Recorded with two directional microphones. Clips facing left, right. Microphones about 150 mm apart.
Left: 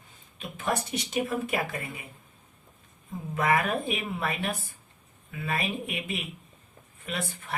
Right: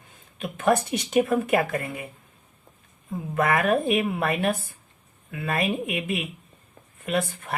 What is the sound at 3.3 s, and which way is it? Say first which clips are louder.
Speech: right 4 dB; 50° right (ahead or behind).